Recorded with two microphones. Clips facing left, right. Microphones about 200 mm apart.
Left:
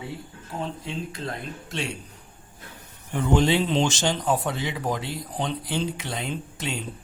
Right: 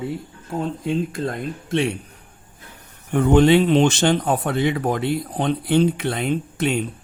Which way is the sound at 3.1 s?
55° right (ahead or behind).